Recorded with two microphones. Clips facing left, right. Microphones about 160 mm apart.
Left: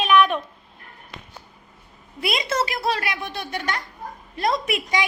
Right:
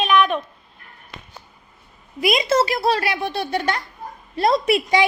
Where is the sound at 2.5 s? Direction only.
30° right (ahead or behind).